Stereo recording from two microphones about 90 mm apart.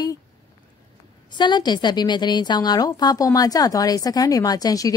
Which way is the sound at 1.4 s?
55° left (ahead or behind).